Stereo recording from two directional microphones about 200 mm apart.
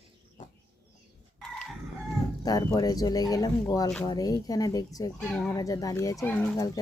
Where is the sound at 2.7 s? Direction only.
20° left (ahead or behind).